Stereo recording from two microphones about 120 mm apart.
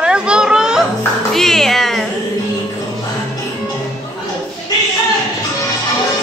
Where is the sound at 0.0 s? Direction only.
5° right (ahead or behind).